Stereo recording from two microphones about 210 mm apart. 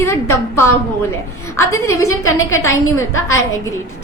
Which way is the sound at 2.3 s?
75° left (ahead or behind).